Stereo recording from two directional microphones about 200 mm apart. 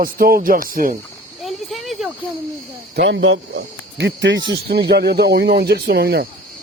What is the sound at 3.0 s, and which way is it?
Speech, 60° right (ahead or behind).